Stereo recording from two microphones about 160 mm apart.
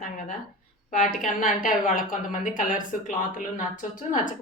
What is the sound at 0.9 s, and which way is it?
Speech, 55° left (ahead or behind).